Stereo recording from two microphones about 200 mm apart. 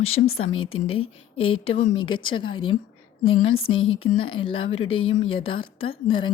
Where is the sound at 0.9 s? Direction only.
30° left (ahead or behind).